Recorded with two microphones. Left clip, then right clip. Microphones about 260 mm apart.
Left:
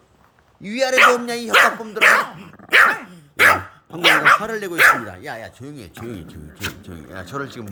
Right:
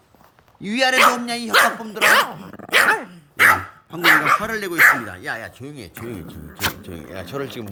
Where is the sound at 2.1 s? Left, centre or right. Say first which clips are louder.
Right 2 dB; right.